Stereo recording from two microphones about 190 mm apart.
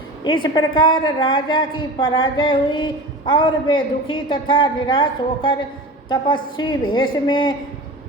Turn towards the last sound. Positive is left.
turn(degrees=20)  # may be behind; listen again after turning